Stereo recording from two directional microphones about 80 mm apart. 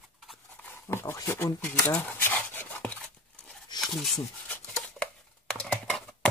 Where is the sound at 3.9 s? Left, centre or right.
Centre.